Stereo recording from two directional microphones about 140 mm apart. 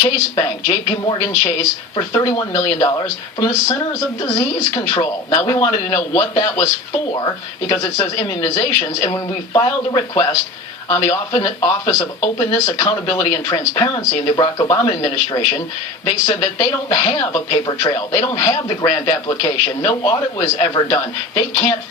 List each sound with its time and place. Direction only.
0.0 s speech: 25° left (ahead or behind)